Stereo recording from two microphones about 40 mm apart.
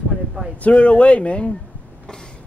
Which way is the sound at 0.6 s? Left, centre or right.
Left.